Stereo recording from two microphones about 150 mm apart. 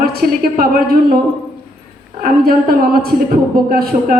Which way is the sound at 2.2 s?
75° right (ahead or behind).